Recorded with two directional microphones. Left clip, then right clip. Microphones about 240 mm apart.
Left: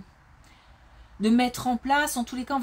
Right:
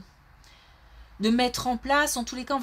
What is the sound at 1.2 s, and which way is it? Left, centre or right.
Speech, right.